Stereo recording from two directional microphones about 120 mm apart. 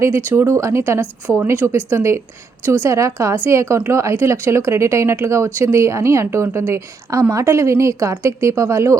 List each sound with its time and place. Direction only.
0.0 s speech: 20° right (ahead or behind)